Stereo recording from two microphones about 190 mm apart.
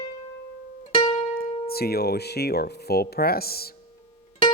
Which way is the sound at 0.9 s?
30° left (ahead or behind).